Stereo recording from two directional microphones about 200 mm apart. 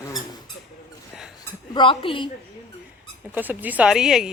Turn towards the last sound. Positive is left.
turn(degrees=0)  # may be behind; listen again after turning